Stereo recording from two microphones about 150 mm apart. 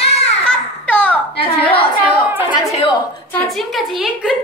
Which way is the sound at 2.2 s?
10° right (ahead or behind).